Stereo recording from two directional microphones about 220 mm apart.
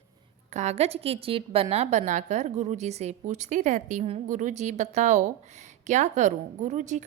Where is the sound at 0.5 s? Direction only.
30° right (ahead or behind).